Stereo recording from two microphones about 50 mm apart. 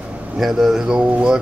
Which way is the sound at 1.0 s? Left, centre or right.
Right.